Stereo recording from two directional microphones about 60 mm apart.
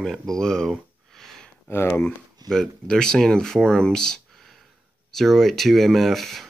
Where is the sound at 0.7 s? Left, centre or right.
Centre.